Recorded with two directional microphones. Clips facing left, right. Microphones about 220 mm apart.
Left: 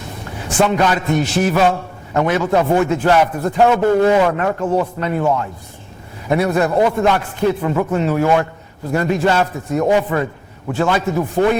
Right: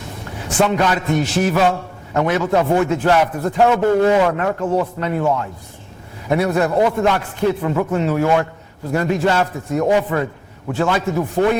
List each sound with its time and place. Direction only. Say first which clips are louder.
0.3 s a sound: left 1 dB; 20° left (ahead or behind)
0.6 s a man's voice: left 1 dB; 20° left (ahead or behind)
5.2 s a man's voice: left 1 dB; 25° left (ahead or behind)
6.2 s a man's voice: left 1 dB; 15° left (ahead or behind)